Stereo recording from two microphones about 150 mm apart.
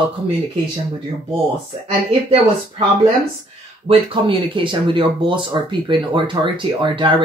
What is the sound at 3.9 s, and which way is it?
Speech, 35° right (ahead or behind).